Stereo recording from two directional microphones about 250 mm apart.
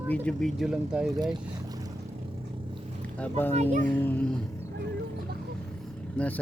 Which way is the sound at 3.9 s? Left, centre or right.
Centre.